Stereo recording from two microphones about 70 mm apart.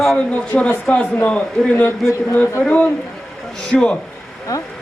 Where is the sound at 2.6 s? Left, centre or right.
Centre.